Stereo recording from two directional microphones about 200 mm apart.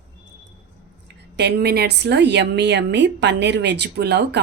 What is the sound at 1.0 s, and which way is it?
A woman's voice, 60° right (ahead or behind).